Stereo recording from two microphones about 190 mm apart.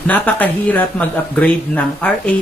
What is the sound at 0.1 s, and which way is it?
Speech, 10° left (ahead or behind).